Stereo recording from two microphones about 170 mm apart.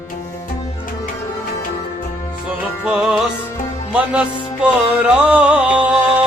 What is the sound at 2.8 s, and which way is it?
Music, 5° right (ahead or behind).